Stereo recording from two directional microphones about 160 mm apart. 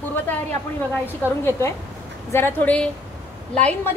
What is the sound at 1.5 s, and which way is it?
Speech, 15° left (ahead or behind).